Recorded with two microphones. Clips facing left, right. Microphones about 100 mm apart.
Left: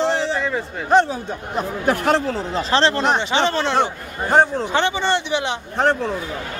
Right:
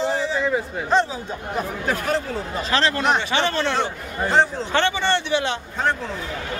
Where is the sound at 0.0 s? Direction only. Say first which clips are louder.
Left 3 dB; 75° left (ahead or behind).